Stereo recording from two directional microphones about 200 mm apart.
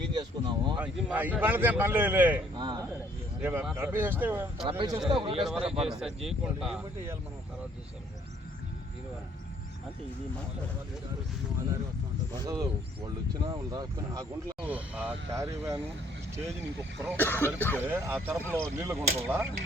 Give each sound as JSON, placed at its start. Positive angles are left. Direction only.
{"t": 0.0, "sound": "speech", "side_deg": -20}
{"t": 0.8, "sound": "speech", "side_deg": -10}
{"t": 2.6, "sound": "a man's voice", "side_deg": -25}
{"t": 3.4, "sound": "speech", "side_deg": -5}
{"t": 4.8, "sound": "a man's voice", "side_deg": -20}
{"t": 5.4, "sound": "speech", "side_deg": 0}
{"t": 5.6, "sound": "a man's voice", "side_deg": -30}
{"t": 6.2, "sound": "speech", "side_deg": 0}
{"t": 12.4, "sound": "a man's voice", "side_deg": -20}
{"t": 14.7, "sound": "speech", "side_deg": -5}
{"t": 17.2, "sound": "cough", "side_deg": 10}
{"t": 17.8, "sound": "speech", "side_deg": -10}